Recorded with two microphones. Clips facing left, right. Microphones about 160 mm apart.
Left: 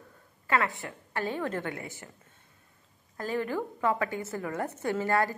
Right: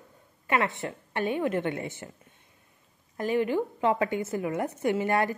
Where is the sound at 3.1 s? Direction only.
20° right (ahead or behind).